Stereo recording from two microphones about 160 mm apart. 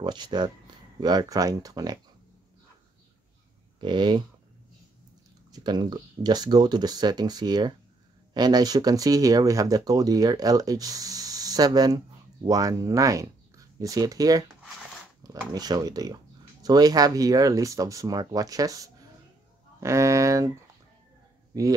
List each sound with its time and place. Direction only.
0.0 s speech: 30° right (ahead or behind)
3.8 s speech: 30° right (ahead or behind)
5.5 s speech: 25° right (ahead or behind)
21.5 s speech: 25° right (ahead or behind)